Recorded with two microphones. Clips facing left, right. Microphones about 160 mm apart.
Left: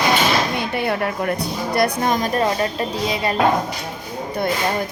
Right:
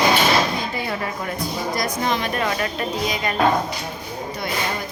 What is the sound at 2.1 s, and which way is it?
A woman's voice, 35° left (ahead or behind).